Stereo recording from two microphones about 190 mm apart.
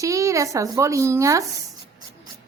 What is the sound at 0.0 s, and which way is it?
Speech, 15° right (ahead or behind).